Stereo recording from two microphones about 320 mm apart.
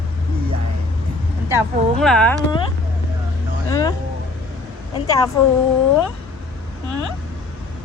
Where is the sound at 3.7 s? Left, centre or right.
Centre.